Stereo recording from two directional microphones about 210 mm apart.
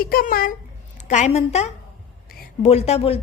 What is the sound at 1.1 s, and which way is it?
A woman's voice, 35° left (ahead or behind).